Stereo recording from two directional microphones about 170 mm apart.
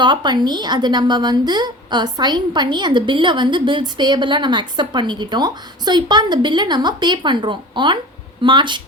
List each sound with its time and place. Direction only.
0.0 s a woman's voice: 25° right (ahead or behind)